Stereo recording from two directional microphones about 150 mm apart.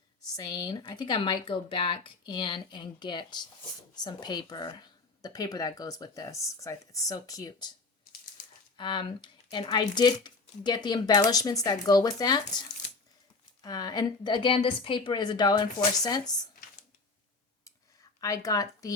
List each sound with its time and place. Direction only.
0.3 s speech: 25° left (ahead or behind)
8.7 s speech: 30° left (ahead or behind)
13.6 s speech: 25° left (ahead or behind)
18.2 s speech: 25° left (ahead or behind)